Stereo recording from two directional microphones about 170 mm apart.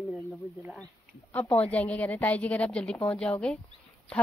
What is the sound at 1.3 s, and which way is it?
Speech, 10° left (ahead or behind).